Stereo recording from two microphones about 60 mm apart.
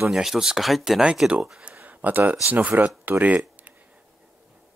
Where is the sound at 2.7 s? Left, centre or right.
Right.